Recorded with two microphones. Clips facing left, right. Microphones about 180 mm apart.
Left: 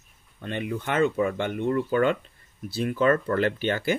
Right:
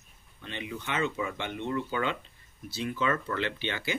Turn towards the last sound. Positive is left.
turn(degrees=50)  # may be behind; listen again after turning